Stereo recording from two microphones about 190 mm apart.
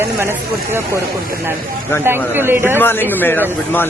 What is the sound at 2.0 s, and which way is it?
Speech, 10° right (ahead or behind).